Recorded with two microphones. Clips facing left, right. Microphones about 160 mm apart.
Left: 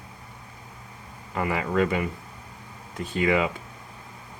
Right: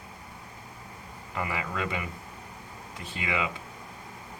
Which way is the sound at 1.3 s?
50° left (ahead or behind).